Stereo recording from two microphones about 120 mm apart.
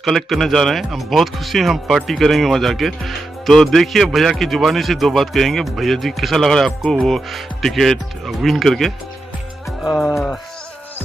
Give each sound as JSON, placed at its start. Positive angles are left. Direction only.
{"t": 0.0, "sound": "speech", "side_deg": 0}
{"t": 9.9, "sound": "speech", "side_deg": 0}